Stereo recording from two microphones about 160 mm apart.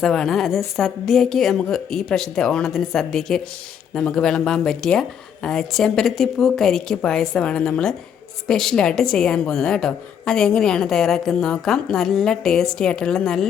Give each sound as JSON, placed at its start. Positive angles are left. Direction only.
{"t": 0.0, "sound": "a woman's voice", "side_deg": 5}